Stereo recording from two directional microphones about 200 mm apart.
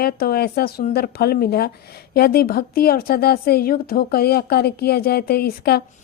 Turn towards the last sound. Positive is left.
turn(degrees=50)  # may be behind; listen again after turning